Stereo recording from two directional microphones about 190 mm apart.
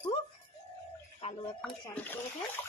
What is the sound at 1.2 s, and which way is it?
Speech, 35° left (ahead or behind).